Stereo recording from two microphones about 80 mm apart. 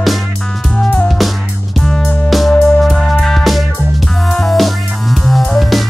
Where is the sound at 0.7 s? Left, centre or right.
Left.